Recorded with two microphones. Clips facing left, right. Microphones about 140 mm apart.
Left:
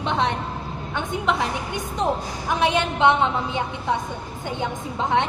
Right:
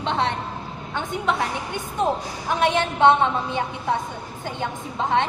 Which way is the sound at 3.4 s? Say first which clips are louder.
Even; 20° left (ahead or behind).